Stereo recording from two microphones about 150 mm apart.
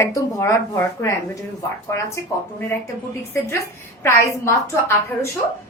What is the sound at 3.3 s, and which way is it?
A woman's voice, 20° left (ahead or behind).